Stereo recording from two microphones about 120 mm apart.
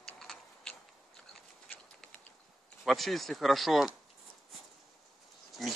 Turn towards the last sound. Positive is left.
turn(degrees=0)  # may be behind; listen again after turning